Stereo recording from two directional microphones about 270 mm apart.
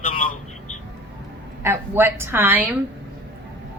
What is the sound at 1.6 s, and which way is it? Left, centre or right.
A woman's voice, centre.